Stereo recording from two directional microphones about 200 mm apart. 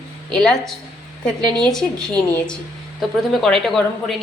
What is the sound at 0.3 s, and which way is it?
A woman's voice, 5° left (ahead or behind).